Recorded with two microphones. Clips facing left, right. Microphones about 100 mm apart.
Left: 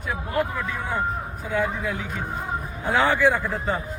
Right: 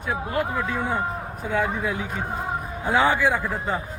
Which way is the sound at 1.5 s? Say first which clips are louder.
Right 1 dB; 20° right (ahead or behind).